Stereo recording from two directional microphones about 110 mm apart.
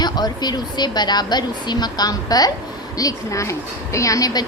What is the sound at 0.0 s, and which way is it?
A woman's voice, 40° left (ahead or behind).